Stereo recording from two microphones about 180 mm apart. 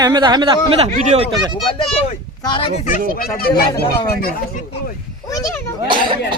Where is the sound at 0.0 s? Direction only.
25° right (ahead or behind).